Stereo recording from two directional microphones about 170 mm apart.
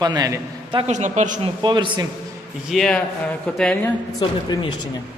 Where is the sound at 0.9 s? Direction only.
45° right (ahead or behind).